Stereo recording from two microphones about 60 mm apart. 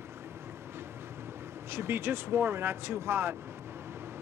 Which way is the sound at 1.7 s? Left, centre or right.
Right.